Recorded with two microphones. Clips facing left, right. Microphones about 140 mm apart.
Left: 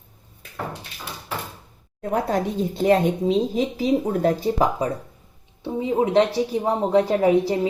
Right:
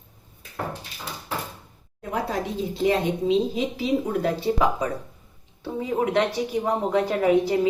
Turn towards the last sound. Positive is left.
turn(degrees=35)  # may be behind; listen again after turning